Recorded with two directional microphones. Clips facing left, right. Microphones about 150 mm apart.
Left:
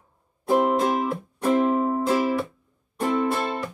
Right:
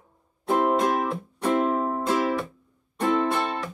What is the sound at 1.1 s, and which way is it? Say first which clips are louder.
Music: left 2 dB; 5° left (ahead or behind).